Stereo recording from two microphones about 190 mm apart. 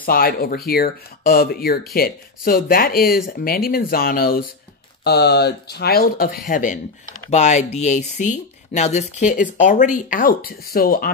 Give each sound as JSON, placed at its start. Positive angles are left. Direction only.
{"t": 0.0, "sound": "speech", "side_deg": 50}